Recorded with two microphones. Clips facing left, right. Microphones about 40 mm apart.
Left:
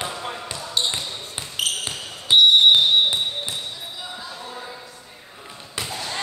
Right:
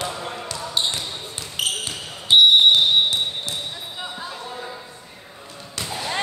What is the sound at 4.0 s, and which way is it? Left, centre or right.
Basketball bounce, right.